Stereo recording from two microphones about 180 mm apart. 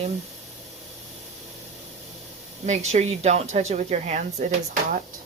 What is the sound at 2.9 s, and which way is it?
Speech, 40° right (ahead or behind).